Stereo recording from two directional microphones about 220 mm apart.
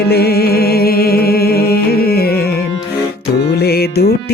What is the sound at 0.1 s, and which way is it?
Music, 45° left (ahead or behind).